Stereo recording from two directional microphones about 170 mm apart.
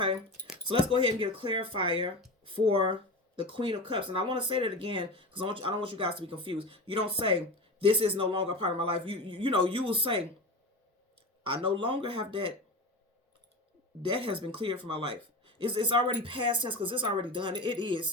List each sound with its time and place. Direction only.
0.9 s speech: 30° right (ahead or behind)
11.4 s speech: 30° right (ahead or behind)
14.1 s speech: 30° right (ahead or behind)